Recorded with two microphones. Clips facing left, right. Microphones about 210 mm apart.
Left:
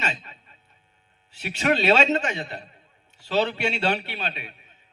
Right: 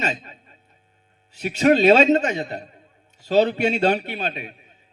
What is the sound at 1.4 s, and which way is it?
A man's voice, 40° right (ahead or behind).